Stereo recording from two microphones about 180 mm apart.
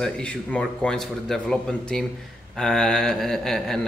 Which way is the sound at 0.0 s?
5° left (ahead or behind).